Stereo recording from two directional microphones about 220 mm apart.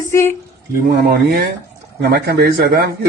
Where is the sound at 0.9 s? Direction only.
45° right (ahead or behind).